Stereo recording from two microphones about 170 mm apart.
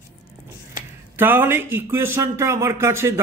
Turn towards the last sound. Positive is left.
turn(degrees=-15)  # may be behind; listen again after turning